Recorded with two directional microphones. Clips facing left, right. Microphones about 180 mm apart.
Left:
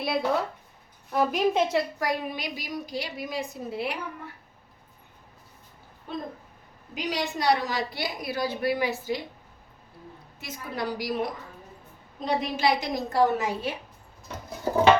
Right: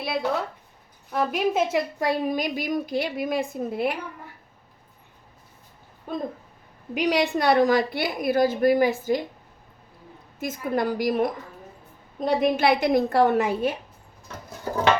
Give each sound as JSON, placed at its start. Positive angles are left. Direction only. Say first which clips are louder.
{"t": 0.0, "sound": "a woman's voice", "louder": "even", "side_deg": 0}
{"t": 2.0, "sound": "a woman's voice", "louder": "right 4 dB", "side_deg": -30}
{"t": 2.3, "sound": "a woman's voice", "louder": "right 8 dB", "side_deg": -50}
{"t": 6.1, "sound": "a woman's voice", "louder": "right 4 dB", "side_deg": -45}
{"t": 6.9, "sound": "a woman's voice", "louder": "right 8 dB", "side_deg": -65}
{"t": 10.4, "sound": "a woman's voice", "louder": "right 7 dB", "side_deg": -50}